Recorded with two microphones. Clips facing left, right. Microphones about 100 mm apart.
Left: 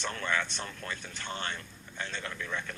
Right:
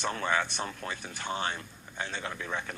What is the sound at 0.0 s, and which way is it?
Speech, 15° right (ahead or behind).